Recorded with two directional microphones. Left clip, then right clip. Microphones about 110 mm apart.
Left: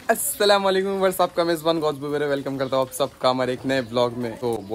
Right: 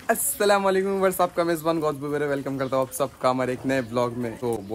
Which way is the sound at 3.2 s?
45° left (ahead or behind).